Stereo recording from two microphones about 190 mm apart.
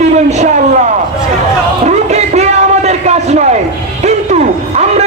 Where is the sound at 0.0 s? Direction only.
35° right (ahead or behind).